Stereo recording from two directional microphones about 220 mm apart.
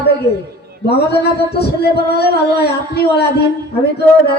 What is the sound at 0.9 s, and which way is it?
Music, 45° left (ahead or behind).